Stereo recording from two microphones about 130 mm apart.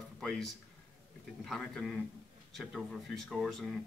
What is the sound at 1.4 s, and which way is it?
Speech, centre (ahead or behind).